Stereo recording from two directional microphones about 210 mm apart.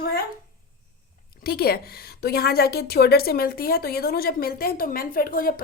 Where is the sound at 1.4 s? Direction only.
45° left (ahead or behind).